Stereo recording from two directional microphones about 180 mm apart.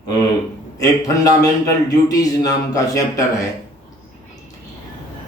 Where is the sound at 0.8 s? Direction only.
20° left (ahead or behind).